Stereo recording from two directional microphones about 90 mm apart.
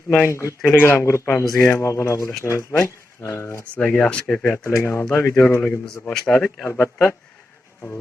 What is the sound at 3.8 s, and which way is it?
Speech, 15° left (ahead or behind).